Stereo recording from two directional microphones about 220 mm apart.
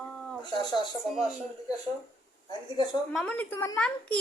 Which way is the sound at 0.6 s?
20° left (ahead or behind).